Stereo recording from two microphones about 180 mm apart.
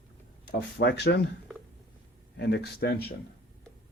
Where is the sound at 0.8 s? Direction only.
70° left (ahead or behind).